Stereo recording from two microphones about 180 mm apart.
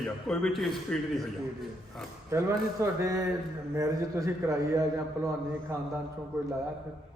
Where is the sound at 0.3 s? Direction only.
Centre (ahead or behind).